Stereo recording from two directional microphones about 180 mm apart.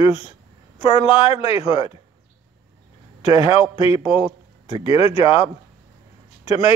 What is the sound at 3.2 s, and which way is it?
A man's voice, 30° left (ahead or behind).